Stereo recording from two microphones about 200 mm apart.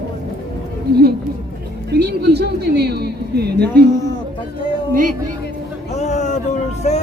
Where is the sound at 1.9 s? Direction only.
55° right (ahead or behind).